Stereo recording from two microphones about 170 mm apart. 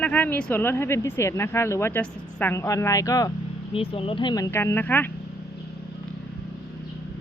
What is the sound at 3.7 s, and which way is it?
Speech, 35° left (ahead or behind).